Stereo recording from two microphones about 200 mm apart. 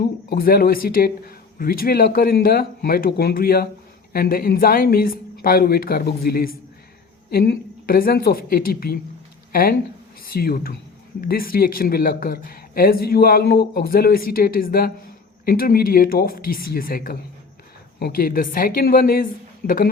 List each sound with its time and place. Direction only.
0.0 s speech: 50° left (ahead or behind)